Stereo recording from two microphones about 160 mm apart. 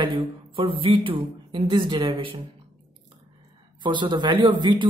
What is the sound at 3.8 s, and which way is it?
A man's voice, 30° right (ahead or behind).